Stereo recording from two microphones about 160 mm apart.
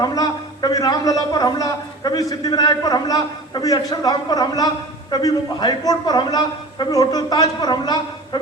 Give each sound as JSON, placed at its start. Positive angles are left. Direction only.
{"t": 0.0, "sound": "a man's voice", "side_deg": 25}